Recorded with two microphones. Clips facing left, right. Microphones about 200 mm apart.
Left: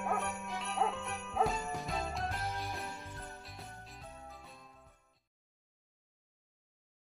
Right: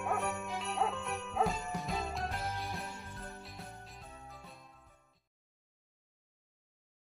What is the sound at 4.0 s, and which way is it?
Jingle bell, centre (ahead or behind).